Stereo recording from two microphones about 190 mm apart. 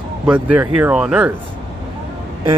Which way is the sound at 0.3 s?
10° right (ahead or behind).